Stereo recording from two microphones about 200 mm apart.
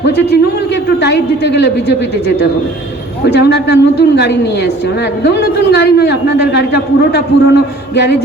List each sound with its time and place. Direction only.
0.0 s a man's voice: 60° left (ahead or behind)
3.2 s a man's voice: 55° left (ahead or behind)